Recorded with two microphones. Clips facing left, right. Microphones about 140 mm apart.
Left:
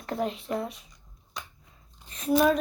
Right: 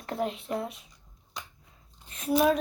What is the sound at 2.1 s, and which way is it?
Speech, 5° right (ahead or behind).